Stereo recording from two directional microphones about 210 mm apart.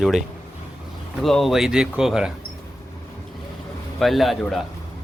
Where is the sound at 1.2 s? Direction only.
Centre (ahead or behind).